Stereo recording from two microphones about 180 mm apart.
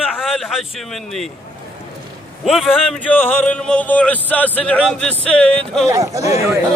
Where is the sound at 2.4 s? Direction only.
Centre (ahead or behind).